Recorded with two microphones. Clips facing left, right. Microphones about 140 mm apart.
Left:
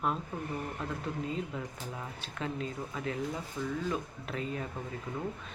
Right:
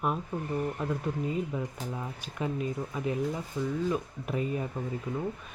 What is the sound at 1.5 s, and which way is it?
Speech, 15° right (ahead or behind).